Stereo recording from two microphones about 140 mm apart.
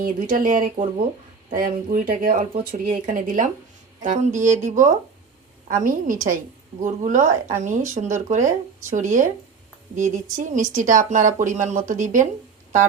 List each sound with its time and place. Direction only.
0.0 s speech: 85° right
1.5 s speech: 90° right
2.4 s speech: 65° right (ahead or behind)